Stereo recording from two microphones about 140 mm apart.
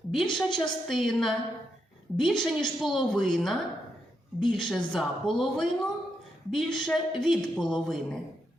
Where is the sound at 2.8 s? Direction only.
Centre (ahead or behind).